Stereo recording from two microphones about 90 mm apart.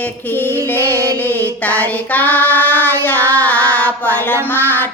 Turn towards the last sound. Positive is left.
turn(degrees=20)  # may be behind; listen again after turning